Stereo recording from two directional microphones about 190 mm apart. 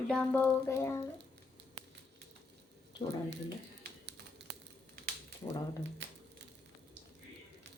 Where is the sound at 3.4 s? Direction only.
60° right (ahead or behind).